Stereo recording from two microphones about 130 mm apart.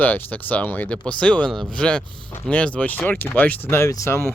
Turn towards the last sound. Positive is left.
turn(degrees=20)  # may be behind; listen again after turning